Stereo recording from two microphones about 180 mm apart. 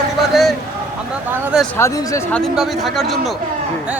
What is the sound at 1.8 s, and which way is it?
Speech, 20° left (ahead or behind).